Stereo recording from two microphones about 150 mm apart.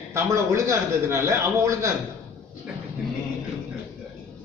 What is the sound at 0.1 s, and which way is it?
A man's voice, 20° right (ahead or behind).